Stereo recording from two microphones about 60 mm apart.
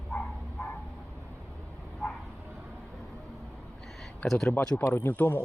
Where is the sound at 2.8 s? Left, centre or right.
Centre.